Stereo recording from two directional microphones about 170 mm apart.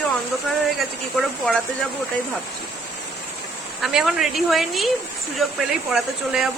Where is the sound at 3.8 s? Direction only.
Centre (ahead or behind).